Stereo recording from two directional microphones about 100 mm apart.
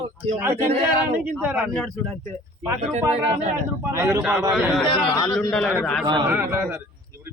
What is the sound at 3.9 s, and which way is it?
Speech, 30° right (ahead or behind).